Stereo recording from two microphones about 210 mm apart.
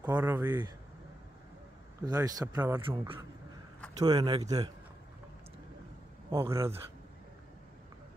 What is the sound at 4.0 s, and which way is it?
Speech, 20° right (ahead or behind).